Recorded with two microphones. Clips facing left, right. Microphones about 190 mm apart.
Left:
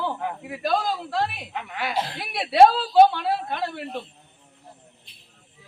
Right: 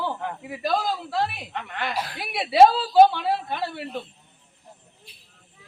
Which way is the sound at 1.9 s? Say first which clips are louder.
Left 3 dB; 25° left (ahead or behind).